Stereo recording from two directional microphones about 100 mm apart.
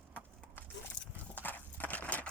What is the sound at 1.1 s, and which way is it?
Horse, 20° left (ahead or behind).